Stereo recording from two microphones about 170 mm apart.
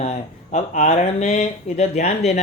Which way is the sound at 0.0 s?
40° left (ahead or behind).